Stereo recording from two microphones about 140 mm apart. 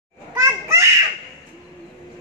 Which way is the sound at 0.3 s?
20° right (ahead or behind).